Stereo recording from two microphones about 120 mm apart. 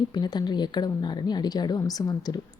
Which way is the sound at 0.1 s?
35° left (ahead or behind).